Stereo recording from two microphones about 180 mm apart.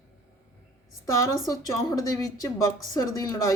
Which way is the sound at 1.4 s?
20° left (ahead or behind).